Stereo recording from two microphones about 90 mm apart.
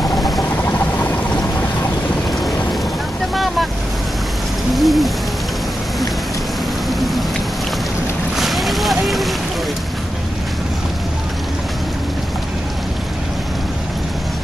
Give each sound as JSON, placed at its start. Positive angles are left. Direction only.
{"t": 0.7, "sound": "a sound", "side_deg": 20}
{"t": 4.7, "sound": "hoot", "side_deg": 0}
{"t": 6.9, "sound": "rain", "side_deg": 0}
{"t": 8.4, "sound": "boat", "side_deg": 0}